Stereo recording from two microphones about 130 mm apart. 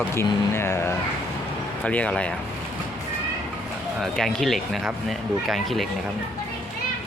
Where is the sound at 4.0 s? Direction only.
5° left (ahead or behind).